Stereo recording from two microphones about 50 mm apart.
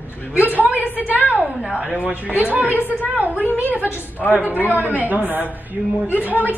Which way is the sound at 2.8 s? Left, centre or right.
Left.